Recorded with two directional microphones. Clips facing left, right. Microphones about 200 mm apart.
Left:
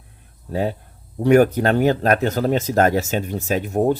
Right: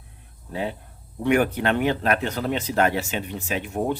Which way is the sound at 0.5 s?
40° left (ahead or behind).